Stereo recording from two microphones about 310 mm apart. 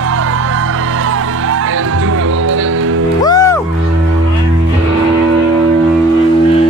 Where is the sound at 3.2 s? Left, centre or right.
Centre.